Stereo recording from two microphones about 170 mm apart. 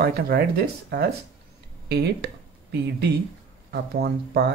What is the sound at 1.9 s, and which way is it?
Speech, 75° right (ahead or behind).